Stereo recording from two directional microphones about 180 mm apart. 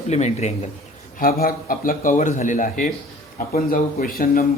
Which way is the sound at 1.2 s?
55° left (ahead or behind).